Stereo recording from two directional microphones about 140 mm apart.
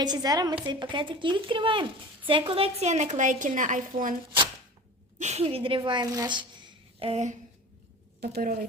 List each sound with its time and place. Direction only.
0.0 s a woman's voice: 30° right (ahead or behind); by 4.1 s 70° right (ahead or behind)
5.2 s a woman's voice: 50° right (ahead or behind)
8.2 s a woman's voice: 90° right